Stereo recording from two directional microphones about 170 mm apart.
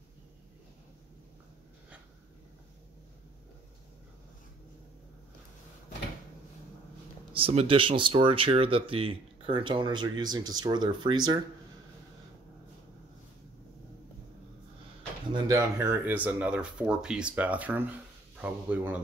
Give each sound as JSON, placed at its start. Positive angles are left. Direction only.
{"t": 7.3, "sound": "speech", "side_deg": -30}
{"t": 15.4, "sound": "speech", "side_deg": -15}